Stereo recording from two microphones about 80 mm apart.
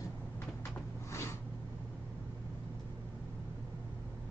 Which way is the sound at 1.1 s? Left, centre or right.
Left.